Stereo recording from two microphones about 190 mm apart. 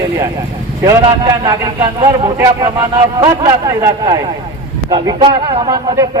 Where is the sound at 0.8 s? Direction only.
20° right (ahead or behind).